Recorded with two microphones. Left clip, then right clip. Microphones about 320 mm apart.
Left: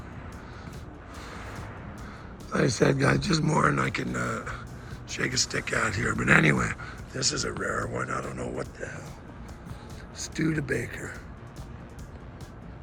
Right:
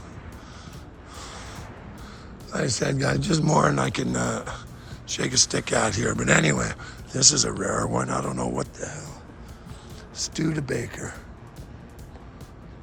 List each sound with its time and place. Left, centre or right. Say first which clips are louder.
2.5 s speech: left 2 dB; centre
7.1 s speech: right 8 dB; centre
10.2 s speech: right 2 dB; centre